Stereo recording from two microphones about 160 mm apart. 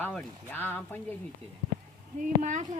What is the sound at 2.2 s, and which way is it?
Speech, 50° right (ahead or behind).